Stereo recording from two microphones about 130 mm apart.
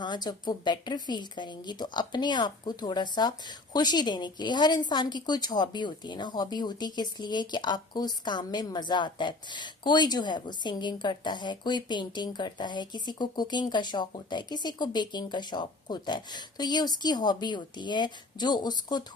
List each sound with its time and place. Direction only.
0.0 s speech: 35° left (ahead or behind)